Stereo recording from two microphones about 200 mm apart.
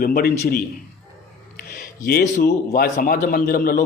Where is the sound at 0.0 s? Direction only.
45° left (ahead or behind).